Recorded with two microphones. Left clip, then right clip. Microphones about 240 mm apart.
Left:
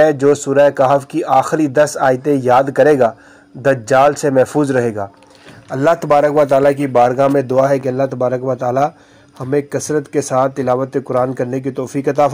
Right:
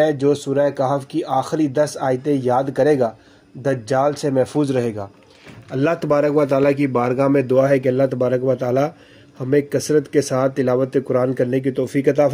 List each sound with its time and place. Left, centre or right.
0.0 s speech: left
5.7 s a man's voice: left